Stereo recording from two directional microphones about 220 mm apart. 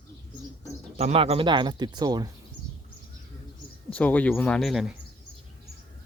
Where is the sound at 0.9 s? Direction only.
25° right (ahead or behind).